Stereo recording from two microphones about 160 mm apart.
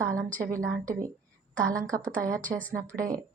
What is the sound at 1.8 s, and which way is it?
Speech, 20° right (ahead or behind).